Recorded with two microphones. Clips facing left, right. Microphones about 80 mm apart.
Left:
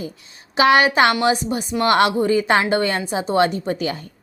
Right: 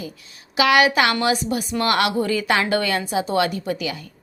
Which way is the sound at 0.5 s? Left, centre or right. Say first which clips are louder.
Left 2 dB; left.